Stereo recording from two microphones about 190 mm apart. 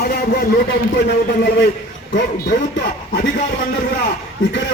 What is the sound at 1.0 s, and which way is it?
Speech, 65° left (ahead or behind).